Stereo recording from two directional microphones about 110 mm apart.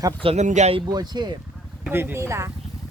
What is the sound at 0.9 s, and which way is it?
Speech, 40° right (ahead or behind).